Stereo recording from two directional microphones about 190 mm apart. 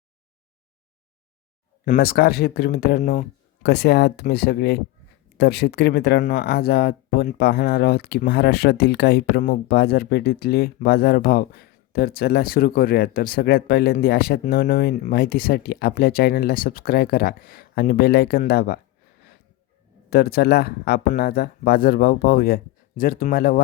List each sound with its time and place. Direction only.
1.8 s speech: 50° left (ahead or behind)
20.1 s speech: 55° left (ahead or behind)